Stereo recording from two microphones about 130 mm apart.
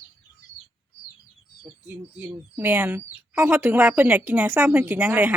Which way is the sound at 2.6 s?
15° right (ahead or behind).